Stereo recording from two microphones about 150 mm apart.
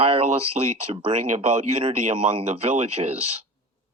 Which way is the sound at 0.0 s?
40° right (ahead or behind).